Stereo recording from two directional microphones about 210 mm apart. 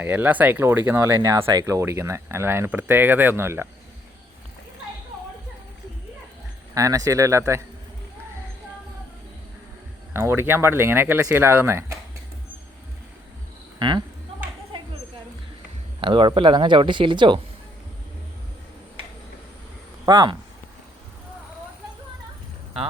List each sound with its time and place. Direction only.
0.0 s speech: 10° right (ahead or behind)
6.7 s speech: 15° right (ahead or behind)
10.1 s speech: 10° right (ahead or behind)
13.7 s speech: 20° right (ahead or behind)
16.0 s speech: 25° right (ahead or behind)
20.1 s speech: 20° right (ahead or behind)